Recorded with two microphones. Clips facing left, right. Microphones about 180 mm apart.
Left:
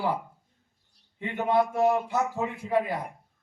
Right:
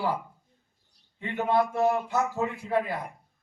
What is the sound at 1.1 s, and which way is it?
A man's voice, 15° left (ahead or behind).